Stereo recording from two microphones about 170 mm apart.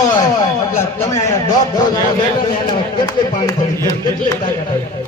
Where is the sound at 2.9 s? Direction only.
25° left (ahead or behind).